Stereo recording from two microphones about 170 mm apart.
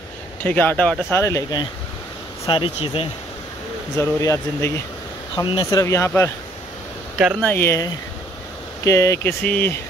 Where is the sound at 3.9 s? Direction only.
15° left (ahead or behind).